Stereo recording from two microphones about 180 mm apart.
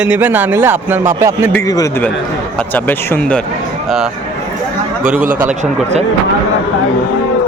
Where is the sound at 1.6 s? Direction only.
20° left (ahead or behind); by 4.1 s 5° right (ahead or behind).